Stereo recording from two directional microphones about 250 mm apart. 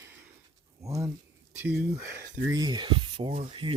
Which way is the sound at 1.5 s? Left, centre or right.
Centre.